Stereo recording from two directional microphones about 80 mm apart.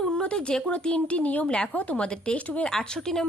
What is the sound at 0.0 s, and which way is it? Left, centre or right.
Speech, centre.